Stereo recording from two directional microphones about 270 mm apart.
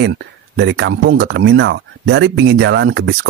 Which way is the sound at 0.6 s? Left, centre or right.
Right.